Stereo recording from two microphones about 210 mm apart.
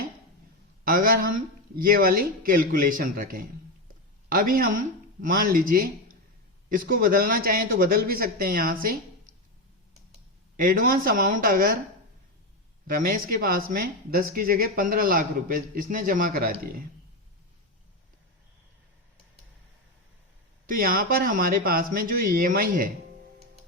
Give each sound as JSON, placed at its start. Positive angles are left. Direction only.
{"t": 0.9, "sound": "speech", "side_deg": -45}
{"t": 10.6, "sound": "speech", "side_deg": -45}
{"t": 12.9, "sound": "speech", "side_deg": -40}
{"t": 20.7, "sound": "speech", "side_deg": -40}